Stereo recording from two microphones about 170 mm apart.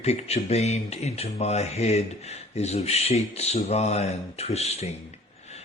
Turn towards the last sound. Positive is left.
turn(degrees=40)  # may be behind; listen again after turning